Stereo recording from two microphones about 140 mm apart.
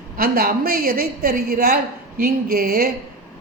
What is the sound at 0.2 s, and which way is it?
A woman's voice, 90° right.